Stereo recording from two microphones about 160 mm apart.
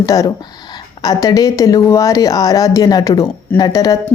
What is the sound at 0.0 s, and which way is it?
Speech, 20° left (ahead or behind).